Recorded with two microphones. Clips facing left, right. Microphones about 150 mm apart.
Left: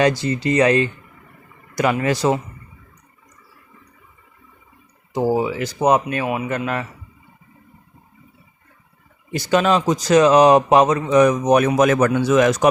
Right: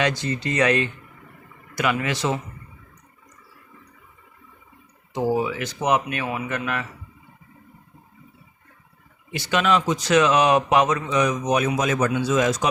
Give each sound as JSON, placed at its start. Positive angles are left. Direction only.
{"t": 0.0, "sound": "speech", "side_deg": 30}
{"t": 5.1, "sound": "speech", "side_deg": 30}
{"t": 9.3, "sound": "speech", "side_deg": 40}
{"t": 11.1, "sound": "a man's voice", "side_deg": 50}